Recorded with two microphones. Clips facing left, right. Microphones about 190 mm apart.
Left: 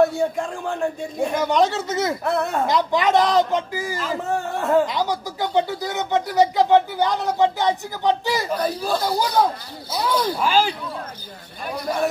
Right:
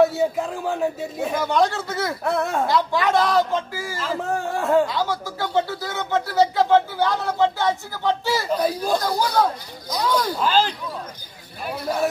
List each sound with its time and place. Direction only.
0.0 s a man's voice: 5° right (ahead or behind)
1.4 s a woman's voice: 20° left (ahead or behind)
2.2 s a man's voice: centre (ahead or behind)
2.6 s a woman's voice: 20° left (ahead or behind)
4.2 s a man's voice: centre (ahead or behind)
4.8 s speech: 15° left (ahead or behind)
8.5 s speech: 10° right (ahead or behind)
9.0 s speech: 10° left (ahead or behind)
11.6 s a man's voice: 5° right (ahead or behind)